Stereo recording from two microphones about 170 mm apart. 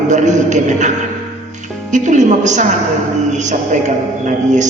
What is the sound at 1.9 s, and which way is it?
A man's voice, 45° right (ahead or behind).